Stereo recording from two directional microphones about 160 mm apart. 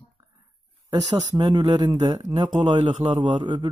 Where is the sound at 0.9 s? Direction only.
25° right (ahead or behind).